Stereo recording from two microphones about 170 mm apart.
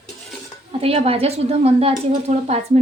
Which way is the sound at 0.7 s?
35° right (ahead or behind).